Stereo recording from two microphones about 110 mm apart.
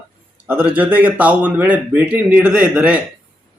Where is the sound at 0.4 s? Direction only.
15° right (ahead or behind).